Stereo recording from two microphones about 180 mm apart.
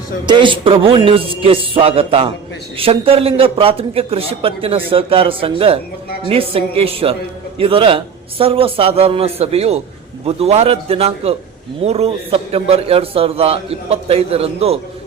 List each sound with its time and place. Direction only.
0.3 s a man's voice: 25° right (ahead or behind)